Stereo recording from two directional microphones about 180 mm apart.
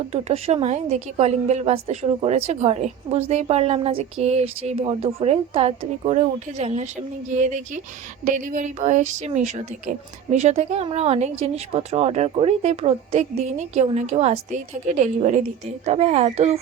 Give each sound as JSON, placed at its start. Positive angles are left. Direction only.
{"t": 0.1, "sound": "a woman's voice", "side_deg": -35}